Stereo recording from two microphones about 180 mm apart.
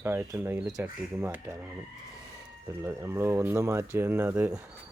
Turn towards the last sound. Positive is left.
turn(degrees=-10)  # may be behind; listen again after turning